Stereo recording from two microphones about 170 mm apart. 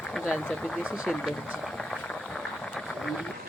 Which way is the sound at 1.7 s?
5° left (ahead or behind).